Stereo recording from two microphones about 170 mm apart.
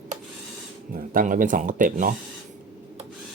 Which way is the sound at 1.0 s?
55° right (ahead or behind).